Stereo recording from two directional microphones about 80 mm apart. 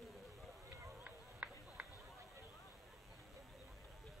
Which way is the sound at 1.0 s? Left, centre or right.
Centre.